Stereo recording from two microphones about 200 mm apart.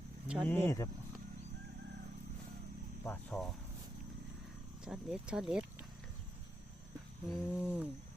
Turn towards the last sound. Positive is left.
turn(degrees=-10)  # may be behind; listen again after turning